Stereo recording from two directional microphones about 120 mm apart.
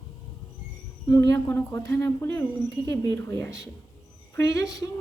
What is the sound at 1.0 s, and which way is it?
Speech, 30° left (ahead or behind).